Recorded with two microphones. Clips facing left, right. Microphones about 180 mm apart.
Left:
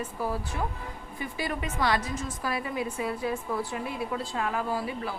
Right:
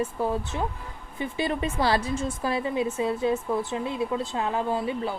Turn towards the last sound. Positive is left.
turn(degrees=-25)  # may be behind; listen again after turning